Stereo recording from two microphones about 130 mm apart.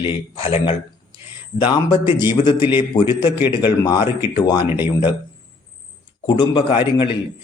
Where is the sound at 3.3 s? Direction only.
15° right (ahead or behind).